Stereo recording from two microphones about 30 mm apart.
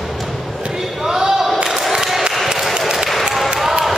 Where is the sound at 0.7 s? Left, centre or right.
Right.